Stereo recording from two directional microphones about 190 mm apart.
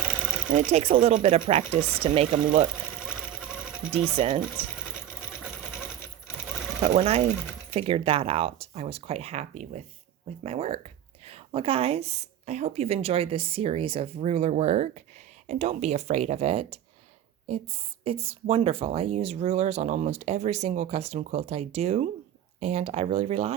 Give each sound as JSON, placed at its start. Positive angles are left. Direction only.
{"t": 0.5, "sound": "speech", "side_deg": -35}
{"t": 3.9, "sound": "speech", "side_deg": -35}
{"t": 6.7, "sound": "speech", "side_deg": -35}
{"t": 18.0, "sound": "speech", "side_deg": -30}